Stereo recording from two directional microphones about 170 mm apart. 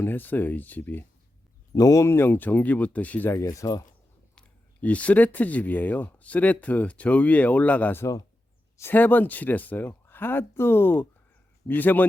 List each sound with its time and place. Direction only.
0.0 s speech: 10° left (ahead or behind)
4.4 s speech: 10° left (ahead or behind)